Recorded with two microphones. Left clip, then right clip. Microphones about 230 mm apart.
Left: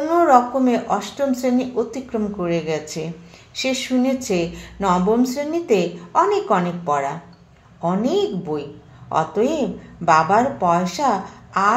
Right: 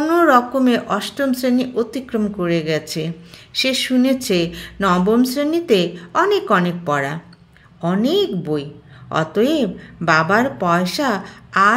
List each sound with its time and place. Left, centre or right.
0.0 s speech: right